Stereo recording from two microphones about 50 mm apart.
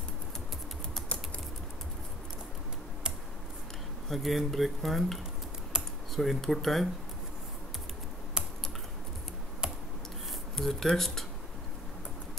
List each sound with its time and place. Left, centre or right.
4.1 s speech: centre
5.7 s computer keyboard: centre
6.1 s speech: centre
10.5 s speech: centre